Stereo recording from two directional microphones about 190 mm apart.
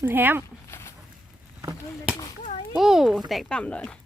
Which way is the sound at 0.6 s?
15° left (ahead or behind).